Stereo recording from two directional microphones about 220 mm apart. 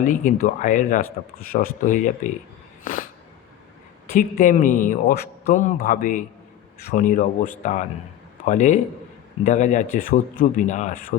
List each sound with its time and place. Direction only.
0.0 s speech: 35° left (ahead or behind)
2.8 s a sound: 40° left (ahead or behind)
4.1 s speech: 40° left (ahead or behind)